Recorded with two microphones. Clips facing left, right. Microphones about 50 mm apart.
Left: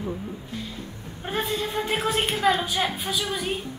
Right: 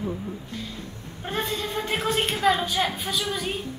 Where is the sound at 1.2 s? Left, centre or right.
Centre.